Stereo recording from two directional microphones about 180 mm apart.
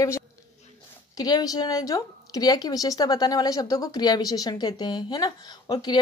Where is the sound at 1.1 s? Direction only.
20° left (ahead or behind).